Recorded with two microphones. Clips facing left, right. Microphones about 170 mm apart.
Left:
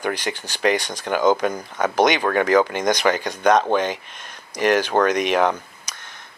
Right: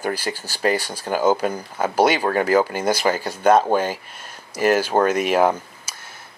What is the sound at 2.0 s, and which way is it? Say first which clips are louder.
Speech: even; 35° right (ahead or behind).